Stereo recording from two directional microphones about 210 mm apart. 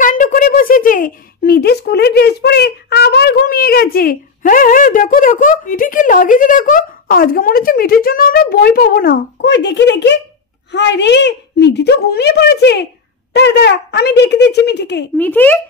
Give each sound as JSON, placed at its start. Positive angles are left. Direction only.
{"t": 0.0, "sound": "speech", "side_deg": 40}
{"t": 15.1, "sound": "speech", "side_deg": 10}